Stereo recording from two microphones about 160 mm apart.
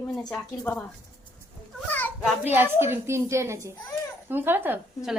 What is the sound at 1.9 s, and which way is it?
Children playing, 10° left (ahead or behind).